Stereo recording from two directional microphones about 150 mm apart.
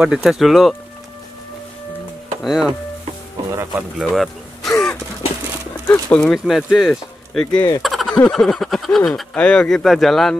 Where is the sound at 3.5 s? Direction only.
20° right (ahead or behind).